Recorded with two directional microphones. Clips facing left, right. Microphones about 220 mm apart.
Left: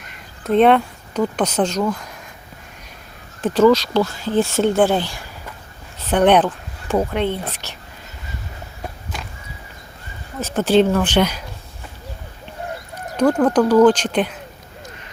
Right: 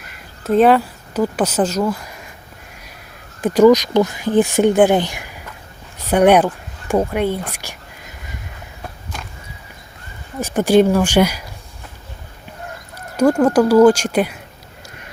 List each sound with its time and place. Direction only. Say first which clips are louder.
0.0 s speech: right 1 dB; 5° right (ahead or behind)
3.4 s speech: right 3 dB; 15° right (ahead or behind)
7.5 s a sound: right 1 dB; 10° right (ahead or behind)
10.4 s speech: right 2 dB; 15° right (ahead or behind)
13.1 s speech: right 2 dB; 10° right (ahead or behind)